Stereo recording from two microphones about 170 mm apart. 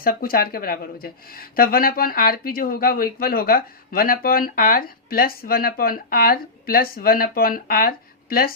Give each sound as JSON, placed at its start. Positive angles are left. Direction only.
{"t": 0.0, "sound": "speech", "side_deg": 60}